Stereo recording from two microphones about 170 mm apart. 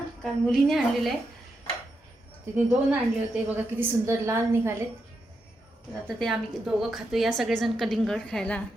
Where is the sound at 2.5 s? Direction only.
10° right (ahead or behind).